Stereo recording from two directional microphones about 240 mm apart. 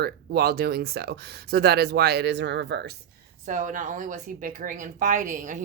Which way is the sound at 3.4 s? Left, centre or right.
Right.